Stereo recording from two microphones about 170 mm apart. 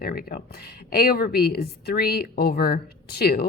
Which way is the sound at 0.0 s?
65° left (ahead or behind).